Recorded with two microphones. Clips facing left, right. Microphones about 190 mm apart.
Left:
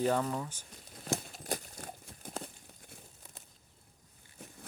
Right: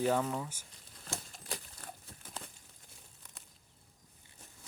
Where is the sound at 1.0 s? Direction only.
40° left (ahead or behind).